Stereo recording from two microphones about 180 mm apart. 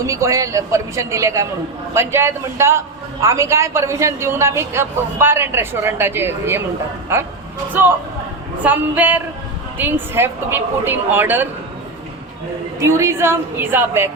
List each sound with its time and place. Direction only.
0.1 s a man's voice: 15° right (ahead or behind)
7.7 s a man's voice: 10° right (ahead or behind)
12.8 s a man's voice: 15° right (ahead or behind)